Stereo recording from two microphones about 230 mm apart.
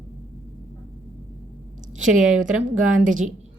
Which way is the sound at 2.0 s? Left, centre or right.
Right.